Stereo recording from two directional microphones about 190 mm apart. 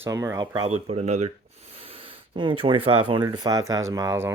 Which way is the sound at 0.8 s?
35° right (ahead or behind).